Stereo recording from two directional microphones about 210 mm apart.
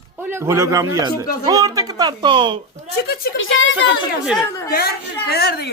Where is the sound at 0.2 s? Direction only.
10° right (ahead or behind).